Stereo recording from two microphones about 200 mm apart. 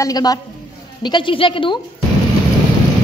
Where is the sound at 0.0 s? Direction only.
20° left (ahead or behind).